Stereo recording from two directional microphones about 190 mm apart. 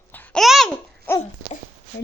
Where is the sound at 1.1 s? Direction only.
10° left (ahead or behind).